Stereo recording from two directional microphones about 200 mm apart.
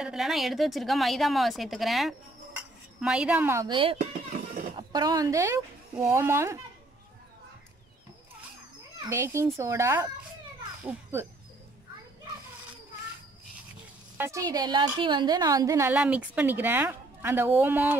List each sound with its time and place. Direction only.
0.0 s a woman's voice: centre (ahead or behind)
3.7 s a woman's voice: 25° right (ahead or behind)
9.1 s a woman's voice: 15° right (ahead or behind)
14.1 s a woman's voice: 15° right (ahead or behind)
15.9 s a woman's voice: 5° right (ahead or behind)